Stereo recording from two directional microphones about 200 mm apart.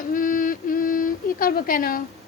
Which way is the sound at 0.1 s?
45° left (ahead or behind).